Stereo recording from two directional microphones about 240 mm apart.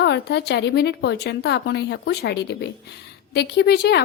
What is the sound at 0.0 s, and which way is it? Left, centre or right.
Speech, left.